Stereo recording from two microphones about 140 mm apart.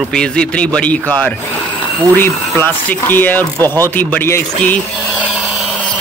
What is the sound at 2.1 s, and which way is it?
Speech, 15° left (ahead or behind).